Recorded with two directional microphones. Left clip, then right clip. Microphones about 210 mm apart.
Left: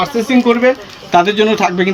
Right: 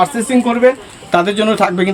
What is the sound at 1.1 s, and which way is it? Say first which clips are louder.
Speech: left 2 dB; 20° right (ahead or behind).